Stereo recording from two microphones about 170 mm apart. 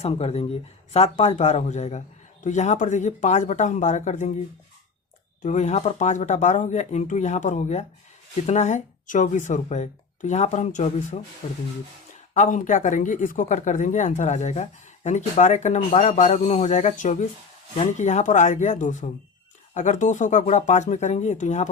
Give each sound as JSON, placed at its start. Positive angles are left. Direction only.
{"t": 0.0, "sound": "speech", "side_deg": 35}
{"t": 5.4, "sound": "speech", "side_deg": 45}